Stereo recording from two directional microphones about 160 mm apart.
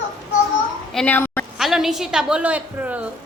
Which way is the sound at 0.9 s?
10° left (ahead or behind).